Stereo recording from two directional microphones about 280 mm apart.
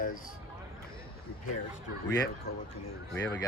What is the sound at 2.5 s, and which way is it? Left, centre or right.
Speech, left.